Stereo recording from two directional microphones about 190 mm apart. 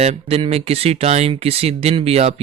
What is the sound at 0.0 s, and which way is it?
Speech, 30° right (ahead or behind).